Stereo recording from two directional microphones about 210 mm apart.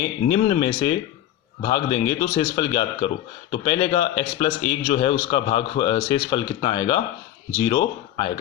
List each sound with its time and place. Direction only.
0.3 s a man's voice: 30° left (ahead or behind)